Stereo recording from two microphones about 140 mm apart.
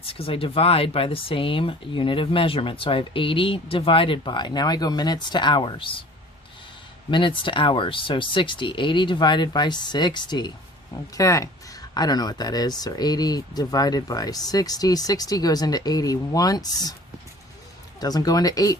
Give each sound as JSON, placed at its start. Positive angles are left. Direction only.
{"t": 0.0, "sound": "speech", "side_deg": 45}
{"t": 7.1, "sound": "speech", "side_deg": 35}
{"t": 18.0, "sound": "speech", "side_deg": 25}